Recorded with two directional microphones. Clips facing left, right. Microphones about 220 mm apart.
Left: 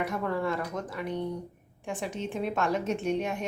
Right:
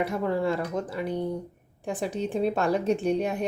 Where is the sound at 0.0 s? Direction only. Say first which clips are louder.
Right 4 dB; 30° right (ahead or behind).